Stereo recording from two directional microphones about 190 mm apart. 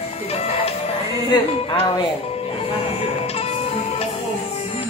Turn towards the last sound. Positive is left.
turn(degrees=30)  # may be behind; listen again after turning